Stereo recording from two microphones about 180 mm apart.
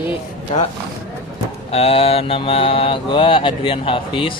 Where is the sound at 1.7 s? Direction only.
35° left (ahead or behind).